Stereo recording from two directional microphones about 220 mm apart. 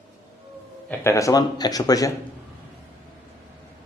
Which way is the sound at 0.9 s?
15° left (ahead or behind).